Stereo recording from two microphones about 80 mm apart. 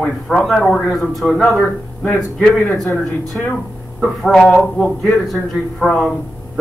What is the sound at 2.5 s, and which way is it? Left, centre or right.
Speech, left.